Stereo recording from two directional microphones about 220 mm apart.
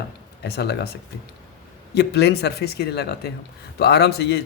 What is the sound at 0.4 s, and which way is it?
Speech, 50° left (ahead or behind).